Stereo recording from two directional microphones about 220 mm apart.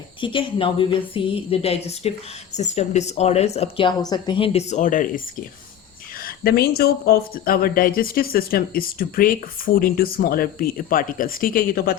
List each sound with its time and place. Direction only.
0.2 s a woman's voice: 20° left (ahead or behind); by 11.9 s 40° left (ahead or behind)